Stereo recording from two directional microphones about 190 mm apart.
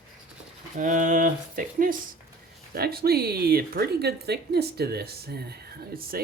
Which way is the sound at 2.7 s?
55° right (ahead or behind).